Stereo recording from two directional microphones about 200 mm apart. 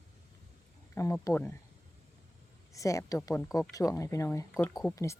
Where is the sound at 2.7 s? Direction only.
15° left (ahead or behind).